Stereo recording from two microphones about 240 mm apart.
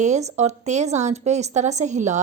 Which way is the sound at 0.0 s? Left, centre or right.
Right.